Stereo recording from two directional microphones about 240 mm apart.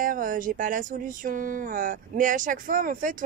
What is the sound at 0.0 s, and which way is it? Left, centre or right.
Speech, right.